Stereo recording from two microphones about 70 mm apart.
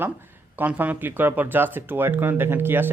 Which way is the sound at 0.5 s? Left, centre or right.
Right.